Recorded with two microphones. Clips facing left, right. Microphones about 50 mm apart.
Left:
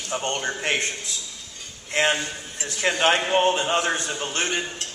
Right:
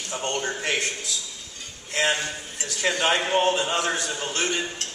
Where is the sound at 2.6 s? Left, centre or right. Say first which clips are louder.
Left 3 dB; left.